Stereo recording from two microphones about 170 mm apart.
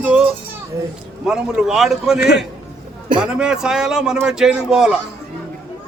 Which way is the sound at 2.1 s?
75° left (ahead or behind).